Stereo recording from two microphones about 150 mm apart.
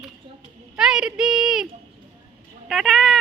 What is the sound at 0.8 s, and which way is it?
Speech, 5° right (ahead or behind).